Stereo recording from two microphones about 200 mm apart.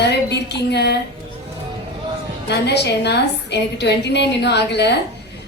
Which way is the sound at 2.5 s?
55° left (ahead or behind).